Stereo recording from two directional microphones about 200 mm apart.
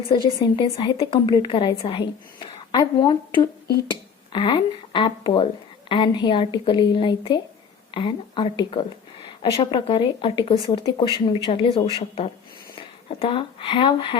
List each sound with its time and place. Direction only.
0.1 s a woman's voice: 25° left (ahead or behind)